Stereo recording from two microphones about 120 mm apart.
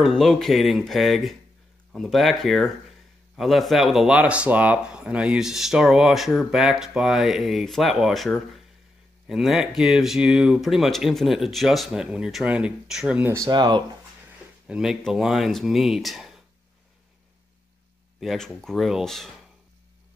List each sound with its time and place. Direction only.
0.0 s speech: centre (ahead or behind)
13.2 s speech: 25° right (ahead or behind)
13.5 s speech: 40° right (ahead or behind)
14.7 s speech: 5° right (ahead or behind)
18.2 s speech: centre (ahead or behind)